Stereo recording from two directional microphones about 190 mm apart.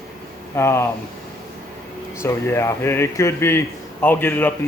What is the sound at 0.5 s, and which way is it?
Speech, 15° left (ahead or behind).